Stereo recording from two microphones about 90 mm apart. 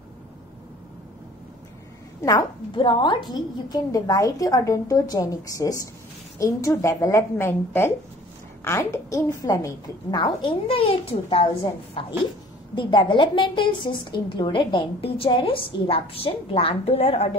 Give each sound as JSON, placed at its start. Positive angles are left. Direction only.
{"t": 2.7, "sound": "a woman's voice", "side_deg": 65}
{"t": 10.1, "sound": "a child's voice", "side_deg": 55}
{"t": 10.7, "sound": "a child's voice", "side_deg": 90}
{"t": 12.7, "sound": "a woman's voice", "side_deg": 60}